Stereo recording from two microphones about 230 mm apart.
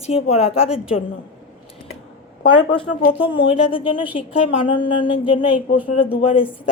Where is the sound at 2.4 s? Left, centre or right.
Left.